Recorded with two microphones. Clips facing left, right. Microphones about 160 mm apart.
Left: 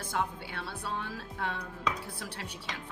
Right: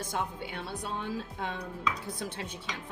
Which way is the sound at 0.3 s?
20° right (ahead or behind).